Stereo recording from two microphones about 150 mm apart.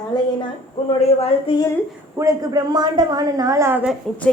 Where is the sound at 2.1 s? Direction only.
25° right (ahead or behind).